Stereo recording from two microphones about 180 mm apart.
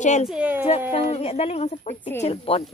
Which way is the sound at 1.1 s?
35° left (ahead or behind).